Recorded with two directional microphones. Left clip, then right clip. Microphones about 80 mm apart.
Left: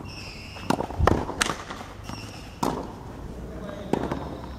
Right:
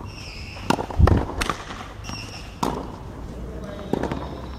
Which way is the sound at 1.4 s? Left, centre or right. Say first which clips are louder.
Left 2 dB; left.